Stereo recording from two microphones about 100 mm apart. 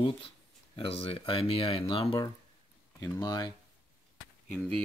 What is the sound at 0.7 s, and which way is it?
Speech, 70° left (ahead or behind).